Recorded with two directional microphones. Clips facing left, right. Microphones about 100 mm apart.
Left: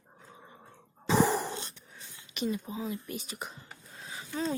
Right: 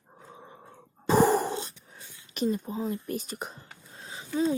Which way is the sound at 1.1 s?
45° right (ahead or behind).